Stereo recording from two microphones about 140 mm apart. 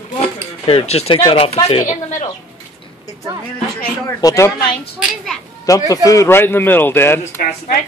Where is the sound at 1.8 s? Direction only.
60° left (ahead or behind).